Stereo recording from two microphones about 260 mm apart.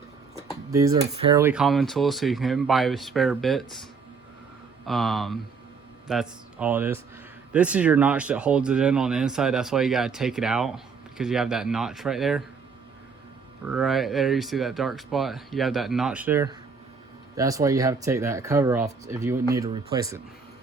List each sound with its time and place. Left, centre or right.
0.3 s a sound: centre
1.1 s speech: right
1.4 s speech: centre
4.9 s speech: centre
13.7 s speech: centre